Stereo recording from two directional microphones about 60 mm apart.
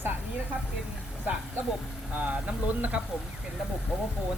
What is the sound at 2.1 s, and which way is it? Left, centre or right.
Speech, right.